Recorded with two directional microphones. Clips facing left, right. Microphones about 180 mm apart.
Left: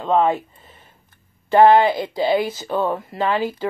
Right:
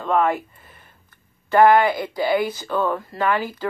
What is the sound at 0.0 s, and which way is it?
Speech, 25° left (ahead or behind).